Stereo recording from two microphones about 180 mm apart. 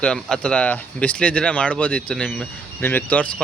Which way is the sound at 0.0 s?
5° left (ahead or behind).